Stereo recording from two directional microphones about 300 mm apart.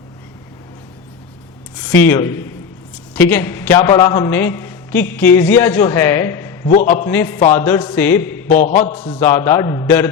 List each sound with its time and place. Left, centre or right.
1.9 s a man's voice: centre
6.7 s a man's voice: left
6.9 s a man's voice: centre
8.4 s a man's voice: left; by 10.1 s centre